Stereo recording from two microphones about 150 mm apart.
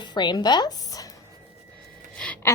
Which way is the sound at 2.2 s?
10° left (ahead or behind).